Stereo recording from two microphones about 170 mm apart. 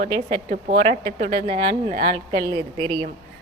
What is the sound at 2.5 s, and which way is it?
Speech, 25° right (ahead or behind).